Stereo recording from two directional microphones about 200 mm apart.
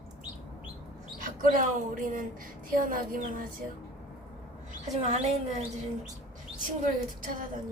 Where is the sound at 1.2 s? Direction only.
40° right (ahead or behind).